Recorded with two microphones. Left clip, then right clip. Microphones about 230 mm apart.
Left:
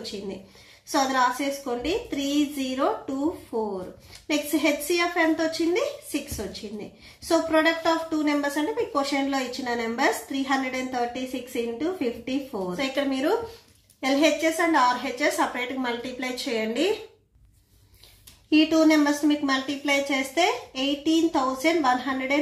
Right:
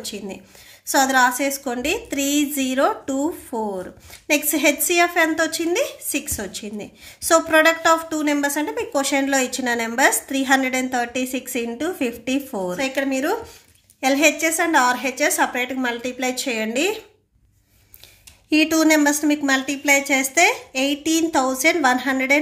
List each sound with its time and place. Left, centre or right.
0.9 s a woman's voice: right
12.7 s a woman's voice: right
18.5 s a woman's voice: right